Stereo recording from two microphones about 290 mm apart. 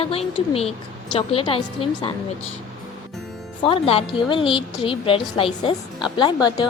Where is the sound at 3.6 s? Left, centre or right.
Centre.